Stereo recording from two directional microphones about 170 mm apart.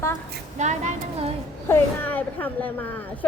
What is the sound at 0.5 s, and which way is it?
Speech, 45° right (ahead or behind).